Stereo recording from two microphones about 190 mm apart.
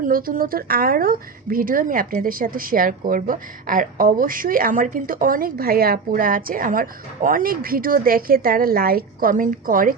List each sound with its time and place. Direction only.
0.0 s a woman's voice: 50° right (ahead or behind)